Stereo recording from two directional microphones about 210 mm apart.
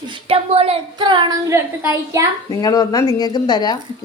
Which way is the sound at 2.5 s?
20° left (ahead or behind).